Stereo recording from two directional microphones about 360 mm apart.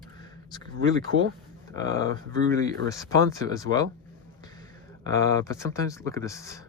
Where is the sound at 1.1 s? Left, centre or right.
Right.